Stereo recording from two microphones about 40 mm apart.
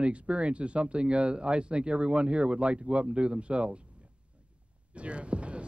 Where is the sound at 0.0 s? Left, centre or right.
Right.